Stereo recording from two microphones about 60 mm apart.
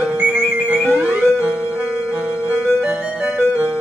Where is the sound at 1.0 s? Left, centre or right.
Centre.